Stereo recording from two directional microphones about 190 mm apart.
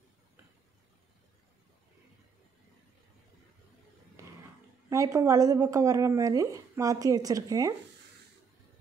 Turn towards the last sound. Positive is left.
turn(degrees=-20)  # may be behind; listen again after turning